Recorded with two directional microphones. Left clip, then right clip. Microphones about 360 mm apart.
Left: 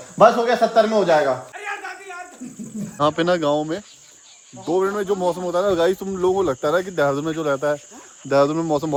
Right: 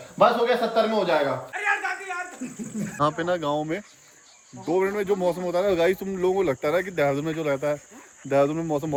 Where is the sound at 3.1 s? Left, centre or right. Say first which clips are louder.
Left 6 dB; left.